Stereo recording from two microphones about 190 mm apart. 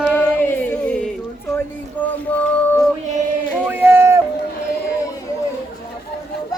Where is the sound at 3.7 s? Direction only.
10° right (ahead or behind).